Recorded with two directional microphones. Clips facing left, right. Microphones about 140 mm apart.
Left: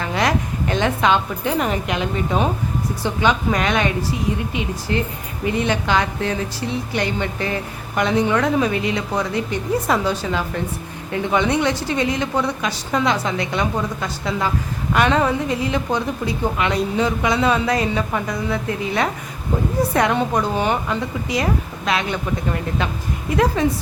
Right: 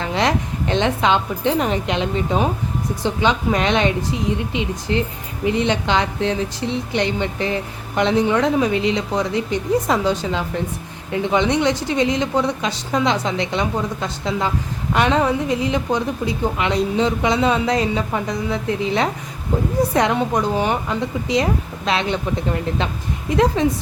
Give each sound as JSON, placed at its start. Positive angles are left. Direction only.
{"t": 0.0, "sound": "a woman's voice", "side_deg": -25}
{"t": 23.6, "sound": "a woman's voice", "side_deg": -20}